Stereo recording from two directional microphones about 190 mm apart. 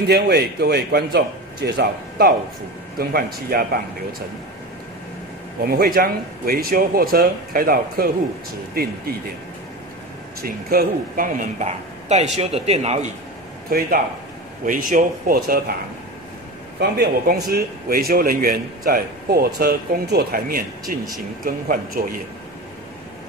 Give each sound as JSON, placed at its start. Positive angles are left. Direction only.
{"t": 0.1, "sound": "a man's voice", "side_deg": -55}
{"t": 5.6, "sound": "a man's voice", "side_deg": -50}
{"t": 10.4, "sound": "speech", "side_deg": -50}
{"t": 13.7, "sound": "a man's voice", "side_deg": -50}
{"t": 16.8, "sound": "a man's voice", "side_deg": -55}